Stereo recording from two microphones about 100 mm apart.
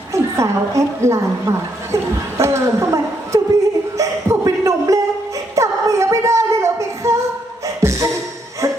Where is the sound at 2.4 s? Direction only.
30° right (ahead or behind).